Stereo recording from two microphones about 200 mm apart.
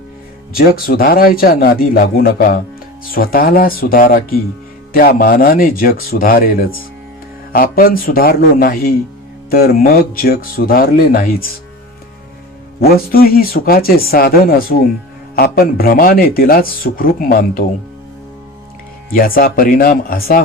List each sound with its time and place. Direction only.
0.5 s speech: 45° left (ahead or behind)
12.8 s speech: 50° left (ahead or behind)
19.1 s speech: 45° left (ahead or behind)